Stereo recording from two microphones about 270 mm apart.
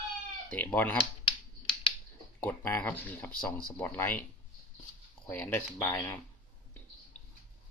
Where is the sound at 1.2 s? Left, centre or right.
Centre.